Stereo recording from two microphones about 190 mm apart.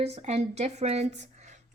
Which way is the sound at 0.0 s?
35° right (ahead or behind).